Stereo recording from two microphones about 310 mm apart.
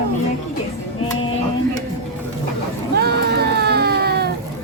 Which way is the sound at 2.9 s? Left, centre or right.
Right.